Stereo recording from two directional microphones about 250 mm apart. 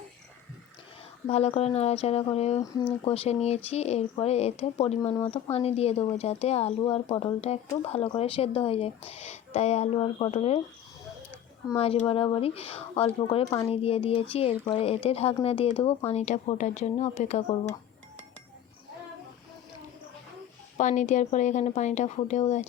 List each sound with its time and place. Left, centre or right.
1.3 s speech: left
11.8 s speech: left
20.7 s speech: left